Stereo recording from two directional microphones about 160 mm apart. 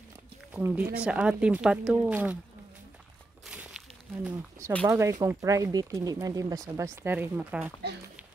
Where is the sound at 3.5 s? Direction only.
5° right (ahead or behind).